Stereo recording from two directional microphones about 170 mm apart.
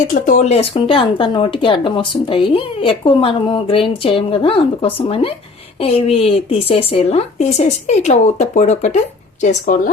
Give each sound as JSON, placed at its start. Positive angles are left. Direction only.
{"t": 0.0, "sound": "speech", "side_deg": 50}